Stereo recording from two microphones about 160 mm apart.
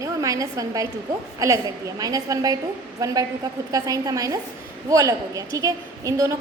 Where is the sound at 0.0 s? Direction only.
20° right (ahead or behind).